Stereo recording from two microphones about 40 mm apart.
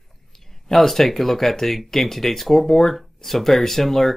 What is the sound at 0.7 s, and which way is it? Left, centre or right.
Speech, centre.